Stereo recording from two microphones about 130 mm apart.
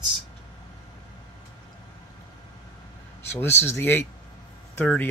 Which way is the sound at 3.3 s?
20° left (ahead or behind).